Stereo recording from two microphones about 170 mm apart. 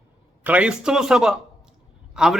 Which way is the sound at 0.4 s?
5° right (ahead or behind).